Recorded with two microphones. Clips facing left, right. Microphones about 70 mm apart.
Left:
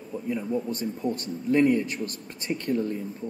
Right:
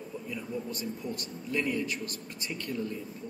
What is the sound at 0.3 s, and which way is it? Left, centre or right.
A man's voice, left.